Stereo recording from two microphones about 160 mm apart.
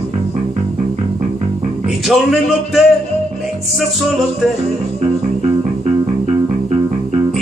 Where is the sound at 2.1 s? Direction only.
Centre (ahead or behind).